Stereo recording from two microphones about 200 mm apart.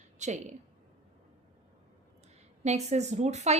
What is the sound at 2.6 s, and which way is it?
Speech, 35° right (ahead or behind).